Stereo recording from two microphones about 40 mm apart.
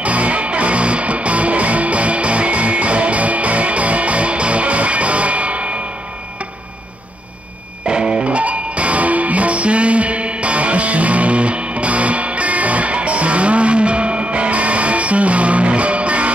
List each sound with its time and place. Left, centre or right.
0.0 s music: right
7.8 s music: right